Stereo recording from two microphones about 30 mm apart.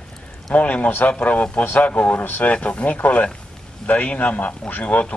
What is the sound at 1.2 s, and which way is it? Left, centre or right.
Speech, left.